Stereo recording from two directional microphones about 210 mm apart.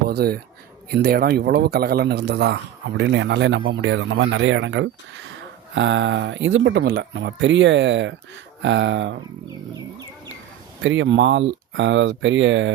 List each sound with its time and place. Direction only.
0.1 s a man's voice: 50° right (ahead or behind)
10.8 s a man's voice: 60° right (ahead or behind)